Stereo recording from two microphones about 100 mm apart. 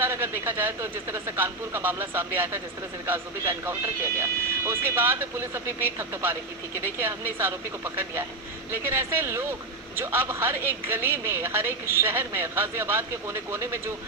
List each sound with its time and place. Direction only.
0.0 s a woman's voice: 25° right (ahead or behind)
8.7 s a woman's voice: 25° right (ahead or behind)